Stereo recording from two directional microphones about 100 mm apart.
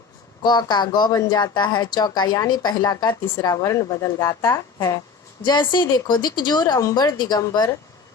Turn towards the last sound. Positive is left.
turn(degrees=45)  # may be behind; listen again after turning